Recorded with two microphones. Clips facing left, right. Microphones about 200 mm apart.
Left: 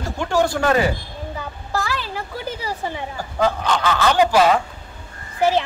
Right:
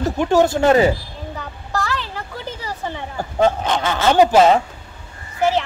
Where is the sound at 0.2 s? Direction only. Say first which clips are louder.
Right 4 dB; 20° right (ahead or behind).